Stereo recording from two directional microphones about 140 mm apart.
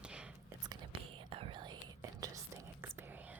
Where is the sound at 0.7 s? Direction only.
35° right (ahead or behind).